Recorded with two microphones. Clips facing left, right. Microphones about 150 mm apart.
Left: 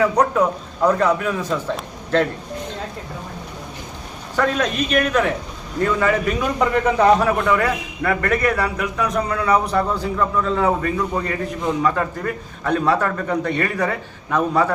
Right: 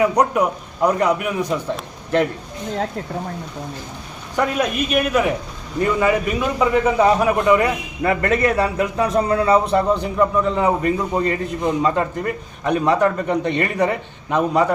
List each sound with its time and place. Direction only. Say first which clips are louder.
0.0 s a man's voice: even; 15° right (ahead or behind)
4.4 s a man's voice: even; 10° right (ahead or behind)